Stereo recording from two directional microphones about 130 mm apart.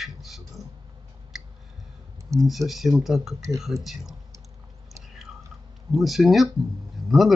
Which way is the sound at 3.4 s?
25° right (ahead or behind).